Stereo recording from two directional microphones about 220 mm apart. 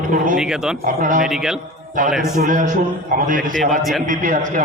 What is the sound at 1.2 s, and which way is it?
Speech, 5° right (ahead or behind).